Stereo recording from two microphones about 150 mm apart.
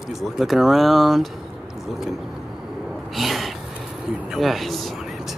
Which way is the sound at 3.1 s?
Centre (ahead or behind).